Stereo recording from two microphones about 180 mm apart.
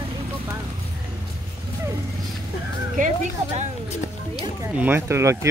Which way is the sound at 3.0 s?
45° right (ahead or behind).